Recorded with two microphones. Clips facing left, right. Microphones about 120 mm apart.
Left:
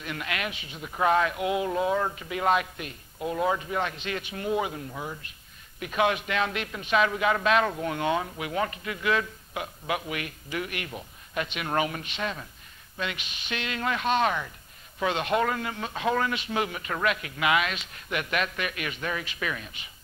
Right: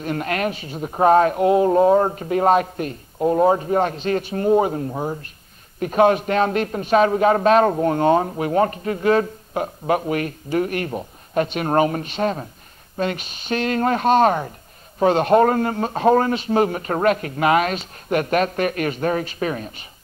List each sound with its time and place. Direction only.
0.0 s a man's voice: 40° right (ahead or behind)